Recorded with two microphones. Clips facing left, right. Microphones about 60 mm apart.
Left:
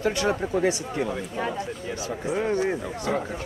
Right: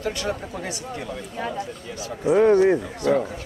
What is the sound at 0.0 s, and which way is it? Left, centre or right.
Speech, centre.